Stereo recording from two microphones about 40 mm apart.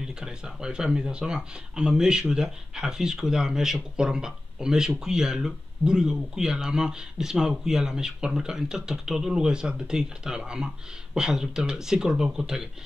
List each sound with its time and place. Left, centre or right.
0.0 s speech: centre